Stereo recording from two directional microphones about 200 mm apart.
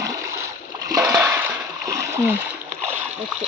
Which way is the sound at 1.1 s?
10° right (ahead or behind).